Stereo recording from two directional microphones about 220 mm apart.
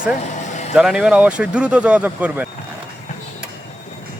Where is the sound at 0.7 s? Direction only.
5° right (ahead or behind).